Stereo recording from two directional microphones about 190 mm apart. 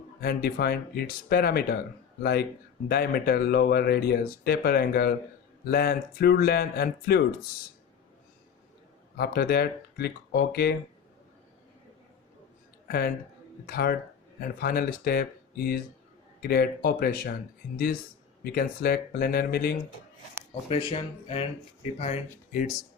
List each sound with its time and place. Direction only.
0.2 s speech: 55° left (ahead or behind)
9.1 s speech: 55° left (ahead or behind)
13.7 s speech: 55° left (ahead or behind)
18.4 s speech: 50° left (ahead or behind)
20.7 s speech: 30° left (ahead or behind)